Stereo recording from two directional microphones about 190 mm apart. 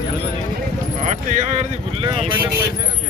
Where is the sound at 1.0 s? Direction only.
40° right (ahead or behind).